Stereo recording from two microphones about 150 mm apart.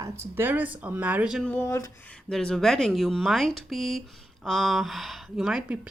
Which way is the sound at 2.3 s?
5° left (ahead or behind).